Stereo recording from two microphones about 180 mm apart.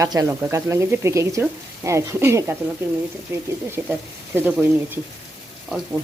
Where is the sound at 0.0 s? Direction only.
20° right (ahead or behind).